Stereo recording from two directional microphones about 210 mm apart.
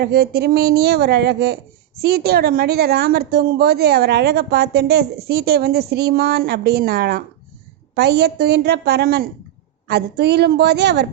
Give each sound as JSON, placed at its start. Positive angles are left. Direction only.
{"t": 0.0, "sound": "a woman's voice", "side_deg": -50}